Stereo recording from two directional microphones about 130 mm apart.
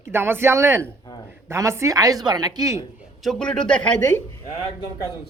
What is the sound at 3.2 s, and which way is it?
Speech, 5° left (ahead or behind).